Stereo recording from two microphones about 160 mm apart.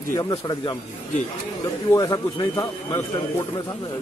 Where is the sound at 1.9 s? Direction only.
20° left (ahead or behind).